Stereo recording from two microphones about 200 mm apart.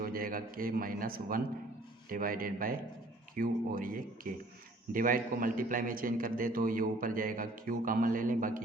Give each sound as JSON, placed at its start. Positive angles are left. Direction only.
{"t": 0.0, "sound": "a man's voice", "side_deg": -45}